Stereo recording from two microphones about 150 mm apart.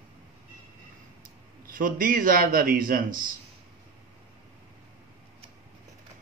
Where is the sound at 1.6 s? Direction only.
70° right (ahead or behind).